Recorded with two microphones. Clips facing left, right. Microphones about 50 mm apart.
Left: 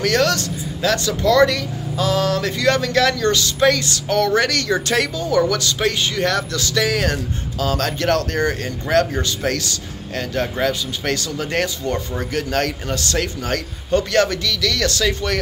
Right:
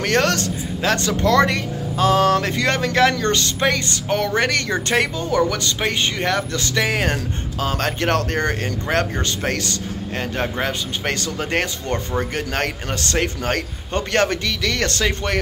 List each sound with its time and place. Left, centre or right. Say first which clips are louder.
0.0 s speech: left 1 dB; right